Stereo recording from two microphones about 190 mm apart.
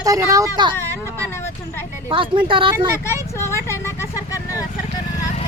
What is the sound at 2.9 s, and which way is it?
Vehicle, 15° left (ahead or behind).